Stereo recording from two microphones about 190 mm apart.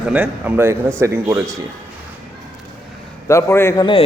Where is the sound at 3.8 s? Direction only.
25° left (ahead or behind).